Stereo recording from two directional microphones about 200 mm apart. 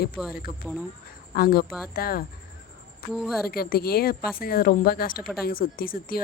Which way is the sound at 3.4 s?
50° left (ahead or behind).